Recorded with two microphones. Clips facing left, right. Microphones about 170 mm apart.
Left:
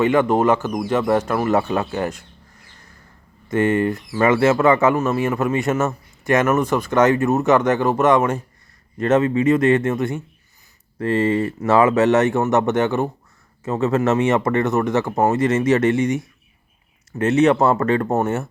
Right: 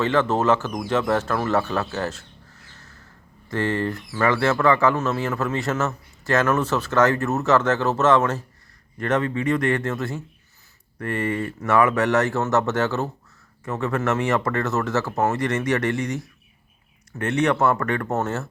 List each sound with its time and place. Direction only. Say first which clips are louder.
0.0 s speech: left 4 dB; 15° left (ahead or behind)
3.5 s speech: left 6 dB; 20° left (ahead or behind)